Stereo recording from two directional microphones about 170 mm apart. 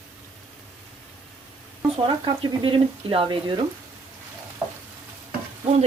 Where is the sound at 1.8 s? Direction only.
30° right (ahead or behind).